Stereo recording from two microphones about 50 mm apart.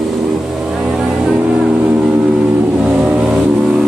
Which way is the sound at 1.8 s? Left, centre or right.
Centre.